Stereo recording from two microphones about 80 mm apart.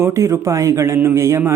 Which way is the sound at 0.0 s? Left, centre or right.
Right.